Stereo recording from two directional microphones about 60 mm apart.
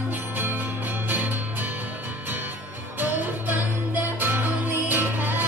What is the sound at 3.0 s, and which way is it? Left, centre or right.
Music, right.